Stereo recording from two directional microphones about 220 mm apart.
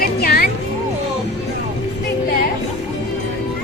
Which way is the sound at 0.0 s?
45° left (ahead or behind).